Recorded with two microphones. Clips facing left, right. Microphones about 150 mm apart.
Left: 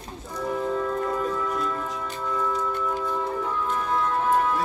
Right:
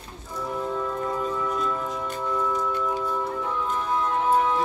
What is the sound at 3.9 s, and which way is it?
Music, 15° right (ahead or behind).